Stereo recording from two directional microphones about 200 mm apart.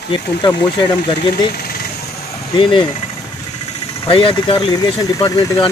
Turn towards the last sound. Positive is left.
turn(degrees=20)  # may be behind; listen again after turning